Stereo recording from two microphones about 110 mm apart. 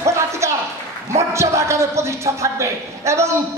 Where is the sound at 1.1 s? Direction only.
25° right (ahead or behind).